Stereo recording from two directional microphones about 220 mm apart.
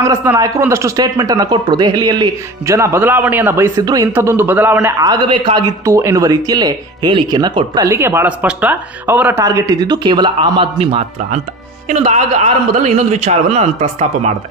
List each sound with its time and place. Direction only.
0.0 s a man's voice: 10° right (ahead or behind); by 14.3 s 30° right (ahead or behind)